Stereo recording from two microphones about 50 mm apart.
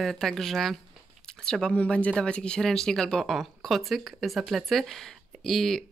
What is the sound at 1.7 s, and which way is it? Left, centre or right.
Speech, left.